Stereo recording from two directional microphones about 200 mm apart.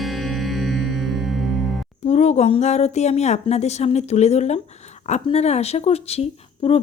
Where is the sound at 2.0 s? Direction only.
35° left (ahead or behind).